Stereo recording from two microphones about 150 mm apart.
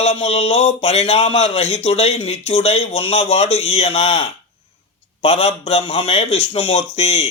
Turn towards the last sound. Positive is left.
turn(degrees=45)  # may be behind; listen again after turning